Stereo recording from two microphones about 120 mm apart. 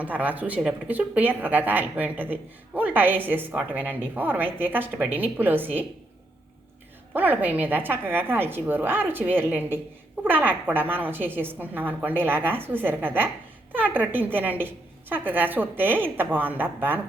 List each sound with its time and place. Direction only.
0.0 s speech: 15° right (ahead or behind)
7.1 s speech: 15° right (ahead or behind)